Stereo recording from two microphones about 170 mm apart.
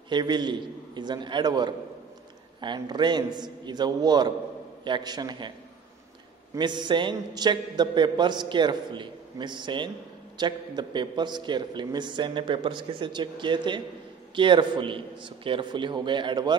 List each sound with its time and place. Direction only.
0.1 s a man's voice: 25° right (ahead or behind)
6.5 s a man's voice: 25° right (ahead or behind)